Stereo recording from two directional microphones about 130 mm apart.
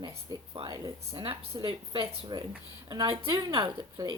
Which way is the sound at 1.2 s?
40° right (ahead or behind).